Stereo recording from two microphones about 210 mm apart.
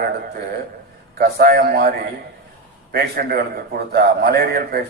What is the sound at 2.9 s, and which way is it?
A man's voice, 45° right (ahead or behind).